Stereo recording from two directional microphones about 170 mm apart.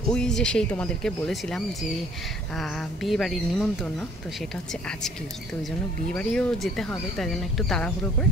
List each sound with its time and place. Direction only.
0.1 s speech: 5° left (ahead or behind)
6.1 s speech: 5° left (ahead or behind)